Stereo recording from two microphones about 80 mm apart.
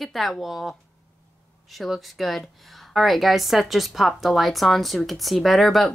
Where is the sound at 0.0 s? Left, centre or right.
Centre.